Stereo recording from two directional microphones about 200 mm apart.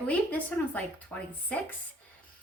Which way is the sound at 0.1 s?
5° left (ahead or behind).